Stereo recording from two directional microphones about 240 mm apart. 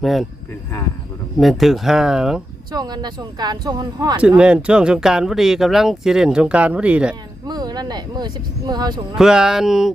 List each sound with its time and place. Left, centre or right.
0.0 s speech: centre
1.4 s speech: centre
2.7 s speech: centre
4.2 s speech: centre
7.4 s speech: centre
9.1 s speech: centre